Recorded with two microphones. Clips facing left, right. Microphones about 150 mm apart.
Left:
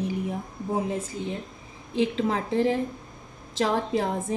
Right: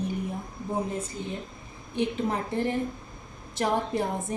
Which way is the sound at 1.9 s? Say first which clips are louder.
Left 3 dB; 90° left.